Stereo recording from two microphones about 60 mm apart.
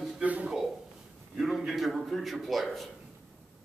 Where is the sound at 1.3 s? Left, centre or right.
Centre.